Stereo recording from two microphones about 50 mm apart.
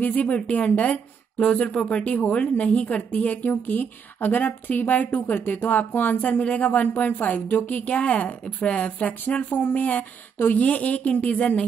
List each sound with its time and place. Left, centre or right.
0.0 s a woman's voice: left
9.2 s a woman's voice: left